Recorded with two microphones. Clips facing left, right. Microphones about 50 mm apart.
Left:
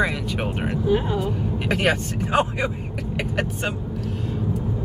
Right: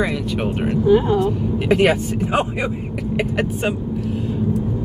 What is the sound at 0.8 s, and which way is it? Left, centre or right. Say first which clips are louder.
Speech: right 7 dB; right.